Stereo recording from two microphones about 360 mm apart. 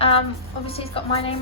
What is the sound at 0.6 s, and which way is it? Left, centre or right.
Speech, centre.